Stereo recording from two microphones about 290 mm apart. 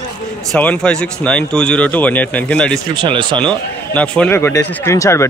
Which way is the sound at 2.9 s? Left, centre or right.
Centre.